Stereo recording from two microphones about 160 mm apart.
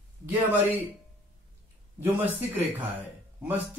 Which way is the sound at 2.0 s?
10° right (ahead or behind).